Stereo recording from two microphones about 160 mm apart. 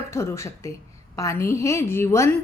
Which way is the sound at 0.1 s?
15° left (ahead or behind).